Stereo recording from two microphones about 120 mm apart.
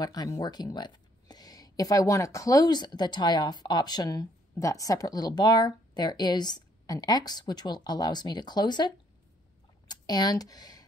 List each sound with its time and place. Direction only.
0.0 s speech: 35° left (ahead or behind)